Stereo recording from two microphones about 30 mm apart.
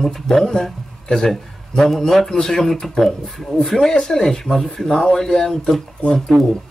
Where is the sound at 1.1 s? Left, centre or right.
Left.